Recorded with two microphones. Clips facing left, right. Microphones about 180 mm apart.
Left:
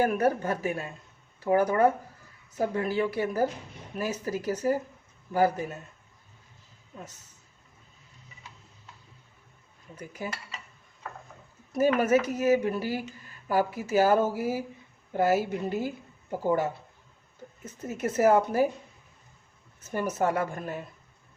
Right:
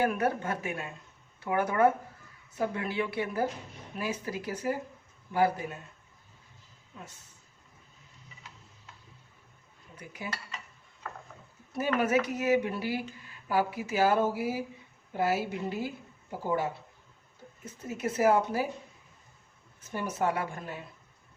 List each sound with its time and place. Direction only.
0.0 s speech: 40° left (ahead or behind)
10.0 s speech: 40° left (ahead or behind)
11.8 s speech: 40° left (ahead or behind)
17.8 s speech: 45° left (ahead or behind)
19.9 s speech: 45° left (ahead or behind)